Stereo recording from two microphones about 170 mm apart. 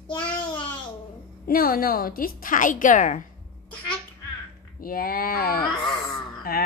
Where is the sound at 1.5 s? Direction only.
60° left (ahead or behind).